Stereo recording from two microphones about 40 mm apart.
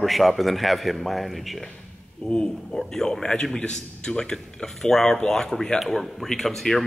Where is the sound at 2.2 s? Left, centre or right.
Left.